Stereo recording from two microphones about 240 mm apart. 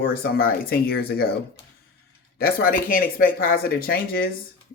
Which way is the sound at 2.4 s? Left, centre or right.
Left.